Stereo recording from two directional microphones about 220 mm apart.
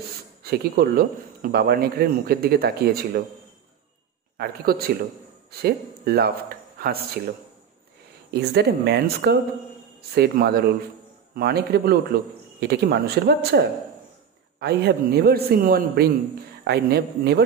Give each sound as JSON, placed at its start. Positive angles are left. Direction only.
{"t": 0.4, "sound": "speech", "side_deg": -45}
{"t": 4.4, "sound": "speech", "side_deg": -45}
{"t": 8.3, "sound": "speech", "side_deg": -45}